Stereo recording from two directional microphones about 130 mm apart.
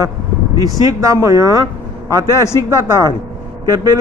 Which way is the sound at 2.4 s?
20° left (ahead or behind).